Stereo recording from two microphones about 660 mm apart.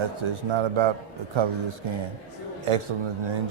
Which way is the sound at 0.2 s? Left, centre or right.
Right.